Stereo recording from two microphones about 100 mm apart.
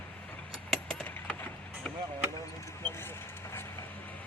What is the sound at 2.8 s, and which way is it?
Vehicle, 25° left (ahead or behind).